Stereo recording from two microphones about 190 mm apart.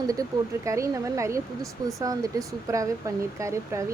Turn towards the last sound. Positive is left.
turn(degrees=-15)  # may be behind; listen again after turning